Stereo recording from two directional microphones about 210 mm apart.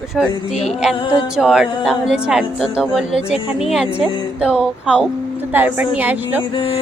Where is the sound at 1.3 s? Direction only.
Centre (ahead or behind).